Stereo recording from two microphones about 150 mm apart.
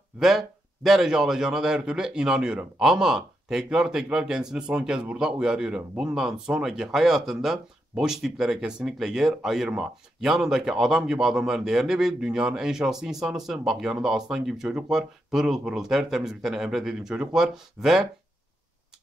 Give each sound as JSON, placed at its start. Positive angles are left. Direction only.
{"t": 0.2, "sound": "a man's voice", "side_deg": 0}